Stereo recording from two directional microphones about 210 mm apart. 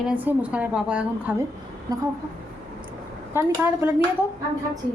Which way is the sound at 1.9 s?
15° right (ahead or behind).